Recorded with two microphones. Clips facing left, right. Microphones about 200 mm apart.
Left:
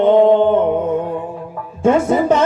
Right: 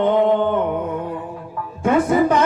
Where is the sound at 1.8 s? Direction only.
25° left (ahead or behind).